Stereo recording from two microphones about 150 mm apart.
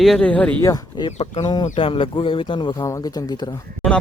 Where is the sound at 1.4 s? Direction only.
30° left (ahead or behind).